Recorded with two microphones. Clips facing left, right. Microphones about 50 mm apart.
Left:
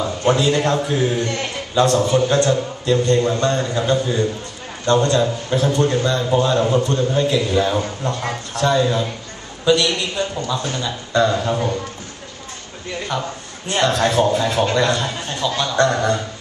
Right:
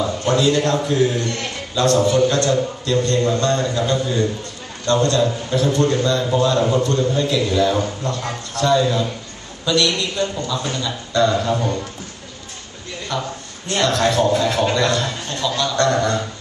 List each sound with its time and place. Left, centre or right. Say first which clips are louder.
0.3 s a man's voice: left 1 dB; centre
6.6 s a man's voice: even; centre
13.1 s a man's voice: left 1 dB; centre